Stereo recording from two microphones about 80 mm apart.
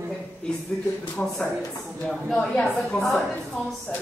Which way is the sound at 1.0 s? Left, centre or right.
Centre.